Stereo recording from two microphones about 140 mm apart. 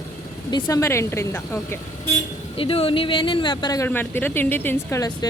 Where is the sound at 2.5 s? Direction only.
40° left (ahead or behind).